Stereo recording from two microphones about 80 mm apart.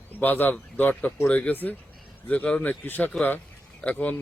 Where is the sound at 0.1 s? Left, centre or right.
Left.